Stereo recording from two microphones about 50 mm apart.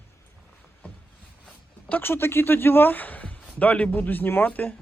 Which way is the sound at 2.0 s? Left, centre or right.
Left.